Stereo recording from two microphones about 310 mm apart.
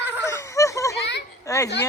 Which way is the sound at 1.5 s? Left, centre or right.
Centre.